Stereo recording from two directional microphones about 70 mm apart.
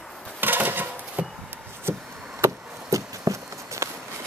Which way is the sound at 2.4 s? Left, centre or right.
Right.